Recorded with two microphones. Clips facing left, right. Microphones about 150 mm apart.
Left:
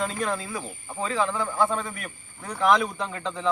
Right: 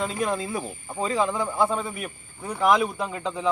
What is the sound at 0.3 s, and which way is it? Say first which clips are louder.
Speech: right 3 dB; 20° right (ahead or behind).